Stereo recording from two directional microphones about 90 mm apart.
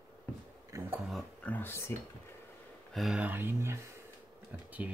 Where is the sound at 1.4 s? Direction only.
20° left (ahead or behind).